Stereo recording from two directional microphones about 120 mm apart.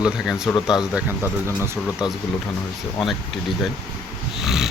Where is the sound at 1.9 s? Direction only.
5° right (ahead or behind).